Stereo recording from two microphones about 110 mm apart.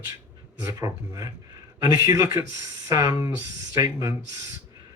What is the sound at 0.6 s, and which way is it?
Speech, 30° right (ahead or behind).